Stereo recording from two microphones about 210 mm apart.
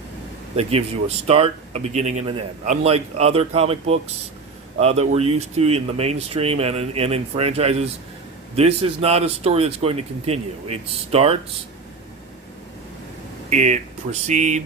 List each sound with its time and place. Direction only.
0.5 s speech: 30° right (ahead or behind)
13.5 s speech: 35° right (ahead or behind)